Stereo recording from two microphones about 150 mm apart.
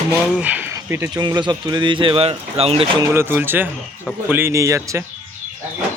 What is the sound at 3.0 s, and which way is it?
Speech, 15° right (ahead or behind).